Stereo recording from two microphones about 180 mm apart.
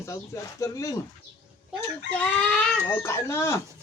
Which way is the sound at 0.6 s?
15° left (ahead or behind).